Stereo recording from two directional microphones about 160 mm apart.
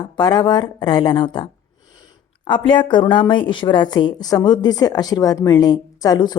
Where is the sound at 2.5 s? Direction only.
30° left (ahead or behind).